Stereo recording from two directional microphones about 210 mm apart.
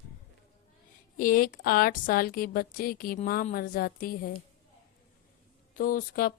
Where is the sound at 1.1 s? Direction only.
40° left (ahead or behind).